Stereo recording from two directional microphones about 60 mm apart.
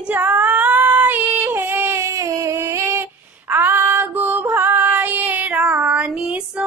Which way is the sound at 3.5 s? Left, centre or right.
Right.